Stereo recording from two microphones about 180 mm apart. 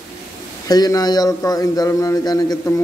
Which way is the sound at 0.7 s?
20° left (ahead or behind).